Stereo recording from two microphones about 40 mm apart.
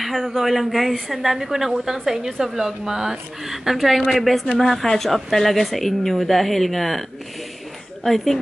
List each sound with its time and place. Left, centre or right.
0.0 s a woman's voice: centre